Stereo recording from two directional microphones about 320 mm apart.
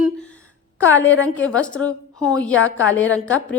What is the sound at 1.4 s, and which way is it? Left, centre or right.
Speech, centre.